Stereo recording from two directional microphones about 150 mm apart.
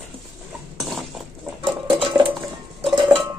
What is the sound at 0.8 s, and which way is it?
Cutlery, centre (ahead or behind).